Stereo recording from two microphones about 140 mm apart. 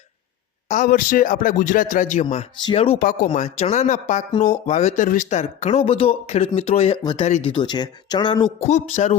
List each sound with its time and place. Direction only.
0.7 s speech: 75° left (ahead or behind)
2.7 s speech: 45° left (ahead or behind)
3.0 s speech: 75° left (ahead or behind)
3.3 s speech: 55° left (ahead or behind)
7.0 s speech: 35° left (ahead or behind)
7.3 s speech: 55° left (ahead or behind)
7.5 s speech: 35° left (ahead or behind)
8.6 s speech: 55° left (ahead or behind)